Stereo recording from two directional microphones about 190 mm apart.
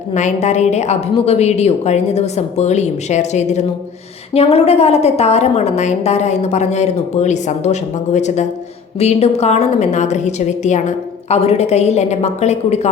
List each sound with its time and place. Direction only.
0.1 s a woman's voice: 40° left (ahead or behind)